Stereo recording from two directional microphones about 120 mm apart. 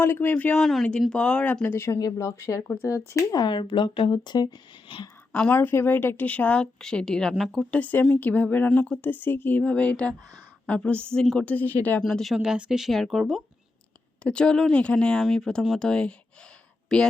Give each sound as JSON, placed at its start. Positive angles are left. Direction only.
{"t": 0.0, "sound": "speech", "side_deg": 15}
{"t": 0.6, "sound": "a woman's voice", "side_deg": 0}
{"t": 5.3, "sound": "speech", "side_deg": 10}
{"t": 7.7, "sound": "speech", "side_deg": 15}